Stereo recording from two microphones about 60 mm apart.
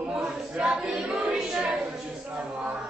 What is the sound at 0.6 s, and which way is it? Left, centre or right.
Choir, centre.